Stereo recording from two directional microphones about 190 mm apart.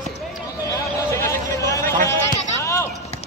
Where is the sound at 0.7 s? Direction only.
15° left (ahead or behind).